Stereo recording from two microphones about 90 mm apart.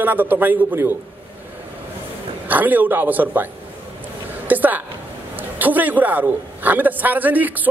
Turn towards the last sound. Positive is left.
turn(degrees=-20)  # may be behind; listen again after turning